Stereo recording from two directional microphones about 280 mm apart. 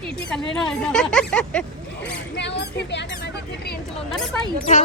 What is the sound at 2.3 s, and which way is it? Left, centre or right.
Speech, left.